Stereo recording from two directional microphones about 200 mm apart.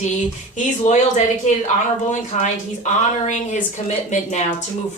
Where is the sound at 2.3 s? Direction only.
35° left (ahead or behind).